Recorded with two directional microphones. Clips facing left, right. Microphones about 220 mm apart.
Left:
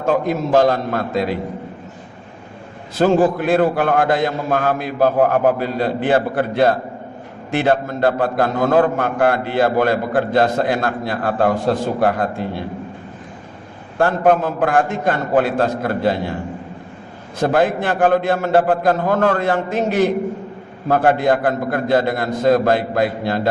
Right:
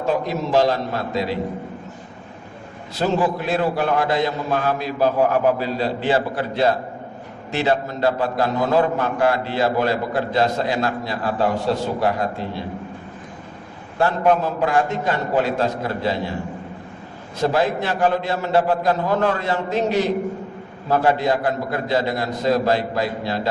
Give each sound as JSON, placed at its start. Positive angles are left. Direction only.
{"t": 0.0, "sound": "a man's voice", "side_deg": 50}
{"t": 3.0, "sound": "a man's voice", "side_deg": 50}
{"t": 14.0, "sound": "a man's voice", "side_deg": 50}
{"t": 17.4, "sound": "a man's voice", "side_deg": 55}